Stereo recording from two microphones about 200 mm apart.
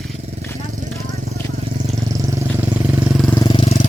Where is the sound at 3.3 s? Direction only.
25° left (ahead or behind).